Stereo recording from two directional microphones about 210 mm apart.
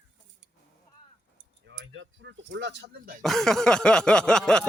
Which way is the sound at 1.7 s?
65° right (ahead or behind).